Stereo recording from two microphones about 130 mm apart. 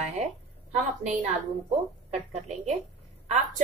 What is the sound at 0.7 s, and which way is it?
Speech, 70° right (ahead or behind).